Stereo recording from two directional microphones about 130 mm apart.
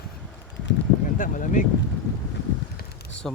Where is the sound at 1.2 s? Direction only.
90° left.